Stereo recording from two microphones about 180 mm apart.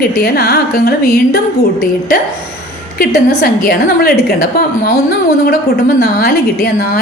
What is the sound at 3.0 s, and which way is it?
Speech, 55° left (ahead or behind).